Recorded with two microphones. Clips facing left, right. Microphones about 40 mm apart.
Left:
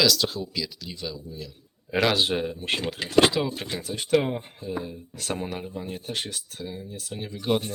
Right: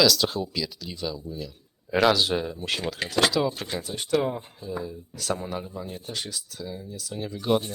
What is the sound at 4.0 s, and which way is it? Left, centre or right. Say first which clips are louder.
Speech: left 2 dB; left.